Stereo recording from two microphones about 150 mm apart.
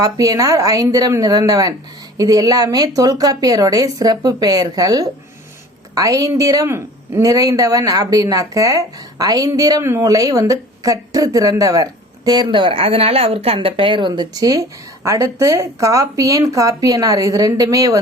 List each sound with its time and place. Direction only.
0.0 s speech: 25° right (ahead or behind)